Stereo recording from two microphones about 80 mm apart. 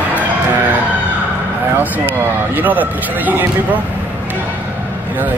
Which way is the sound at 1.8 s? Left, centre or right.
Right.